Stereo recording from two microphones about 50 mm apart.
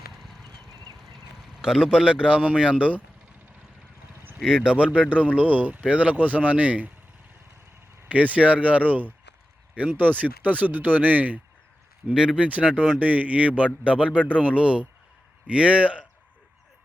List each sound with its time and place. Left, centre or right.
1.6 s speech: centre
4.4 s speech: centre
8.0 s speech: right
12.1 s speech: centre
12.5 s speech: right